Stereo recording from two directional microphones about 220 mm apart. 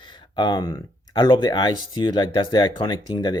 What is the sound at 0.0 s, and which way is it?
Speech, 20° left (ahead or behind).